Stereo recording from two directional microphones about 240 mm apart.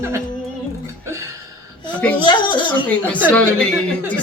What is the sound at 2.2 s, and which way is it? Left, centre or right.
Speech, centre.